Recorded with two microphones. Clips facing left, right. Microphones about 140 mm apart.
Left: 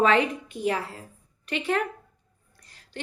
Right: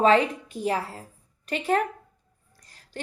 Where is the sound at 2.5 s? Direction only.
40° right (ahead or behind).